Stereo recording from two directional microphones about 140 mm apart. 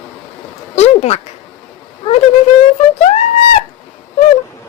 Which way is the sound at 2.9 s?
55° left (ahead or behind).